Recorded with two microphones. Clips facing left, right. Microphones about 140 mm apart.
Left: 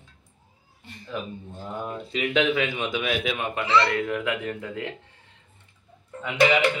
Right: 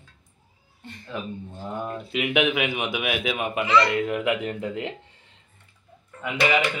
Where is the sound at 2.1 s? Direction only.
10° right (ahead or behind).